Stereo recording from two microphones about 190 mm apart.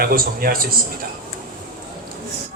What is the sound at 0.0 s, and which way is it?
Speech, 50° right (ahead or behind).